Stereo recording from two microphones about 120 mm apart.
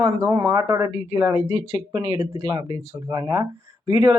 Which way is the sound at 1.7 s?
30° right (ahead or behind).